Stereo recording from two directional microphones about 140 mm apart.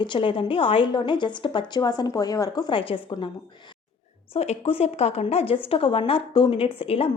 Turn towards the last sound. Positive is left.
turn(degrees=45)  # may be behind; listen again after turning